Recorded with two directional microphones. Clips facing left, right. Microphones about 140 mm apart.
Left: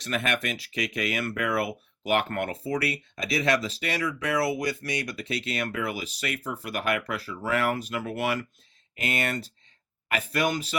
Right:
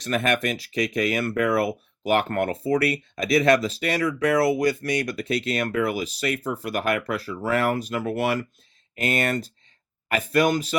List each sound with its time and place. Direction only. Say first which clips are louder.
0.0 s speech: right 5 dB; 40° right (ahead or behind)